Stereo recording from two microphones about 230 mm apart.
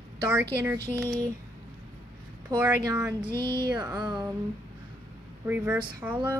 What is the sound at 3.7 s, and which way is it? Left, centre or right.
Speech, centre.